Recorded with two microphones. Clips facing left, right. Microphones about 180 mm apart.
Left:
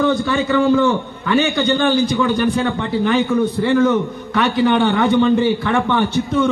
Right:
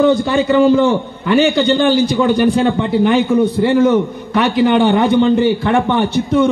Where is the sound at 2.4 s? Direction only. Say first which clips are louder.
Right 5 dB; 15° right (ahead or behind).